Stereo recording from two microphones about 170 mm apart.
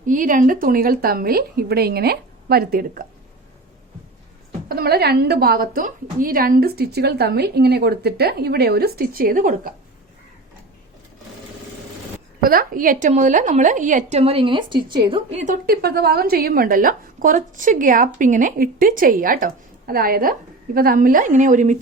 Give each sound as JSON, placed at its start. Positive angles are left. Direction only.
{"t": 0.0, "sound": "a woman's voice", "side_deg": -50}
{"t": 4.7, "sound": "a woman's voice", "side_deg": -65}
{"t": 12.4, "sound": "a woman's voice", "side_deg": -60}
{"t": 15.6, "sound": "a woman's voice", "side_deg": -65}